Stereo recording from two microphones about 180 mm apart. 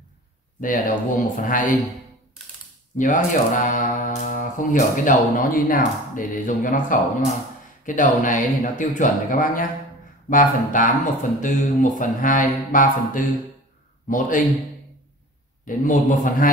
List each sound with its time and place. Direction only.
0.6 s speech: 45° left (ahead or behind)
3.0 s speech: 45° left (ahead or behind)
15.6 s speech: 50° left (ahead or behind)